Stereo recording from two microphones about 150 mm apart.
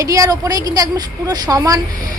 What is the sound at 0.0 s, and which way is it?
A woman's voice, 25° right (ahead or behind).